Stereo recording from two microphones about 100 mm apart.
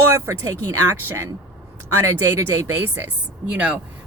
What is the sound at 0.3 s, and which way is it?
Speech, 25° right (ahead or behind).